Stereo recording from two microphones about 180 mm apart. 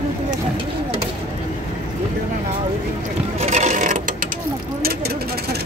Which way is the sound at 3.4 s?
40° right (ahead or behind).